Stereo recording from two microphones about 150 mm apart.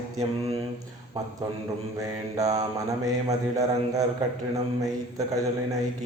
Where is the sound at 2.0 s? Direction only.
25° right (ahead or behind).